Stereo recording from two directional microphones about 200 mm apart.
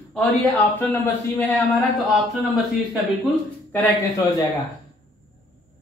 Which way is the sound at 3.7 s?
15° left (ahead or behind).